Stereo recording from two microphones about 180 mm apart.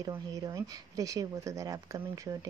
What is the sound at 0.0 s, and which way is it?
Speech, 20° right (ahead or behind).